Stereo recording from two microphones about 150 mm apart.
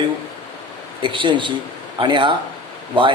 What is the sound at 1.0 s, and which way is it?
Speech, 35° right (ahead or behind).